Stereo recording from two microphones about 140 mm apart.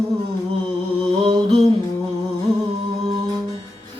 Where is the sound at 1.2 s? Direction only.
30° right (ahead or behind).